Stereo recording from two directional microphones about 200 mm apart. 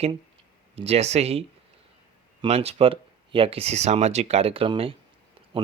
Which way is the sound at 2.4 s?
30° right (ahead or behind).